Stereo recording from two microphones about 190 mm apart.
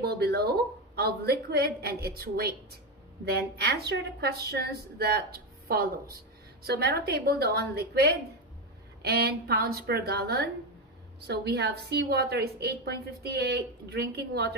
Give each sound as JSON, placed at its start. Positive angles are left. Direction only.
{"t": 0.0, "sound": "a woman's voice", "side_deg": -60}